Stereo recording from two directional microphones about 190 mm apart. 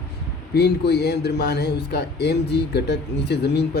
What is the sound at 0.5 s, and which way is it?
Speech, 60° left (ahead or behind).